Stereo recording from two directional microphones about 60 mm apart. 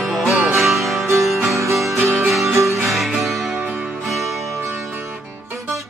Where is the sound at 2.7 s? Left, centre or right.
Centre.